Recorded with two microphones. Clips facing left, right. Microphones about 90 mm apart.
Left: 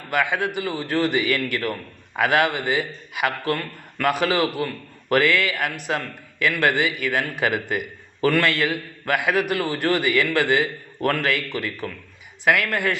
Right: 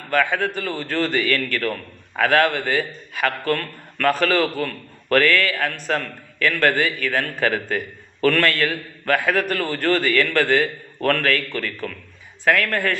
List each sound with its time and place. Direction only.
0.1 s a man's voice: 15° left (ahead or behind)